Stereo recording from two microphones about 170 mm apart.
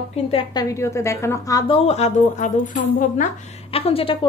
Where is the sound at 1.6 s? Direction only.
35° left (ahead or behind).